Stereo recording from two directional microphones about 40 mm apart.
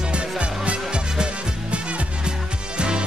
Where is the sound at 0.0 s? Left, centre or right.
Right.